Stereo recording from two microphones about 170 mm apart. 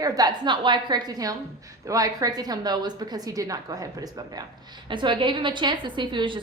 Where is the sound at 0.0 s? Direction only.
20° right (ahead or behind).